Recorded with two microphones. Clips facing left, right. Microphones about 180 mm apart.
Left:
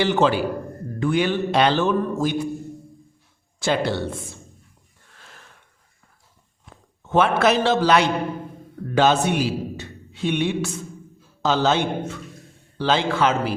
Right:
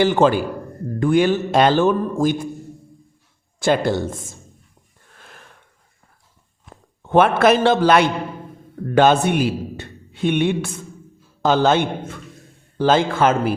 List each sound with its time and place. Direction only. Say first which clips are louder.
0.0 s a man's voice: right 3 dB; 50° right (ahead or behind)
3.6 s a man's voice: right 4 dB; 50° right (ahead or behind)
7.0 s a man's voice: right 4 dB; 55° right (ahead or behind)